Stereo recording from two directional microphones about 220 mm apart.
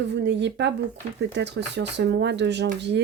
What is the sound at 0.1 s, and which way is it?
A woman's voice, 50° right (ahead or behind).